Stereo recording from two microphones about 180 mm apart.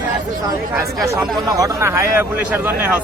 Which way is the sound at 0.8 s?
15° right (ahead or behind).